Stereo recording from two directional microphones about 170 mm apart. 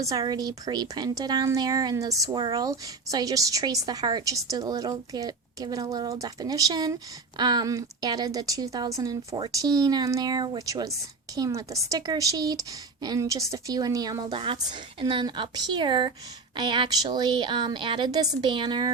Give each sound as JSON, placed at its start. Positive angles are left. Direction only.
{"t": 0.0, "sound": "a woman's voice", "side_deg": -20}